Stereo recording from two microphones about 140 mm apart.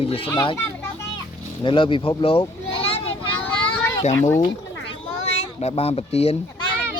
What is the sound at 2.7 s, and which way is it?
Children playing, 45° left (ahead or behind).